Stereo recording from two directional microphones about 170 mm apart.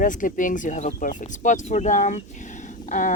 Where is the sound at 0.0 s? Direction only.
50° left (ahead or behind).